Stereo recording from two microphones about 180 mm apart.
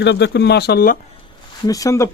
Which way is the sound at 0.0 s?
70° left (ahead or behind).